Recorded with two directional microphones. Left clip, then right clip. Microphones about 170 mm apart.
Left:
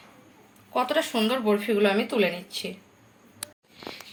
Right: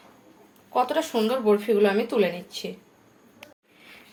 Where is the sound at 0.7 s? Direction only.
15° right (ahead or behind).